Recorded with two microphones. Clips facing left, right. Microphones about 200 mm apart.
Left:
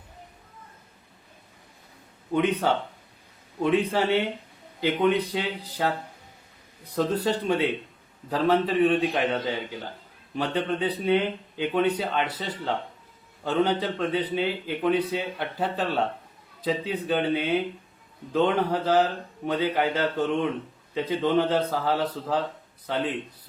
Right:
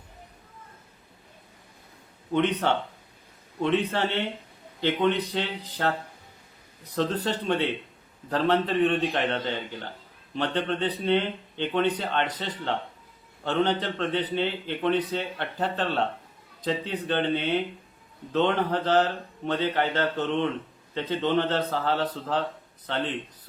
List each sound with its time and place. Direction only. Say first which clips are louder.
2.3 s a man's voice: left 1 dB; 10° left (ahead or behind)
6.9 s a man's voice: left 2 dB; 10° left (ahead or behind)